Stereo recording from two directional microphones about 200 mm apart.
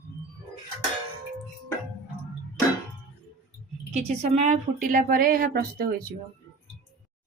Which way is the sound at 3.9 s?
35° right (ahead or behind).